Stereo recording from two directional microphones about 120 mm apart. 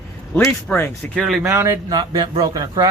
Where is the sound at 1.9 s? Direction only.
35° right (ahead or behind).